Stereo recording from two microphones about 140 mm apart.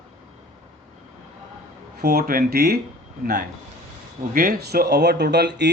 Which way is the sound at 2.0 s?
90° right.